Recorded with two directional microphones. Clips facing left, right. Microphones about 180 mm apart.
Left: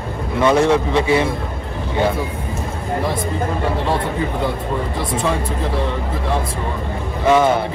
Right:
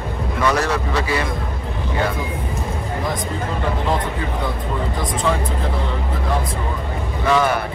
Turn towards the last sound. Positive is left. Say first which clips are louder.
# left 4 dB
turn(degrees=20)  # may be behind; listen again after turning